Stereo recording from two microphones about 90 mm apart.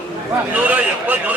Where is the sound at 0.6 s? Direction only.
20° right (ahead or behind).